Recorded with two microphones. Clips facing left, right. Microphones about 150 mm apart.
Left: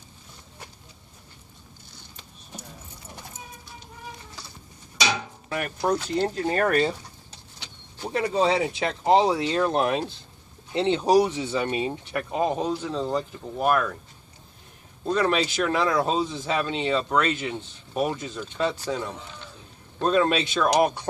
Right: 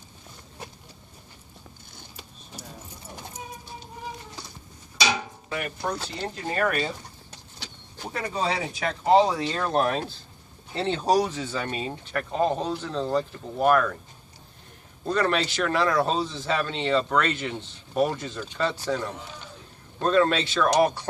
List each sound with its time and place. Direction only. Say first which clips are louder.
5.8 s speech: left 7 dB; 45° left (ahead or behind)
8.1 s speech: left 6 dB; 25° left (ahead or behind); by 13.9 s 5° left (ahead or behind)
15.1 s speech: left 1 dB; 5° left (ahead or behind)